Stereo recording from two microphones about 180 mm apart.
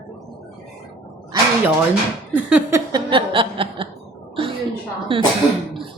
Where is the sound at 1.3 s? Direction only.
20° right (ahead or behind).